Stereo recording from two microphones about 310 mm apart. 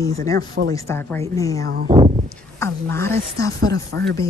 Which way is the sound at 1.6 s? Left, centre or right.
Right.